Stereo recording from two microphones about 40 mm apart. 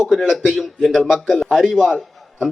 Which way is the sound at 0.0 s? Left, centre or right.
Centre.